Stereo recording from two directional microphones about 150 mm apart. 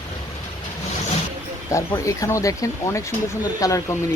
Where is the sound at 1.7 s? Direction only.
20° left (ahead or behind).